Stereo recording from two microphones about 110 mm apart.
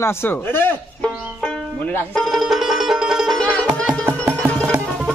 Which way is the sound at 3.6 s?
10° right (ahead or behind).